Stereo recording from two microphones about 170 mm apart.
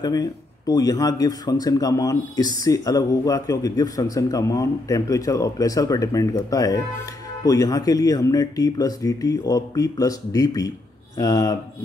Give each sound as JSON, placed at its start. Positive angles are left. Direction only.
{"t": 0.0, "sound": "speech", "side_deg": 20}